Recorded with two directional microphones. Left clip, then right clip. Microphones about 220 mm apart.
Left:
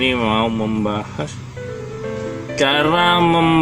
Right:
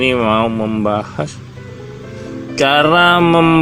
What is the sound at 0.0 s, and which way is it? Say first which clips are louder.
Mantra: right 4 dB; 20° right (ahead or behind).